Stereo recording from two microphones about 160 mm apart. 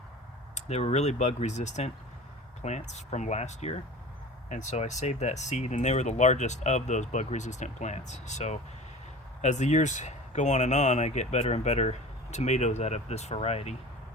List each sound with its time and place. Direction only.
0.5 s speech: 45° left (ahead or behind)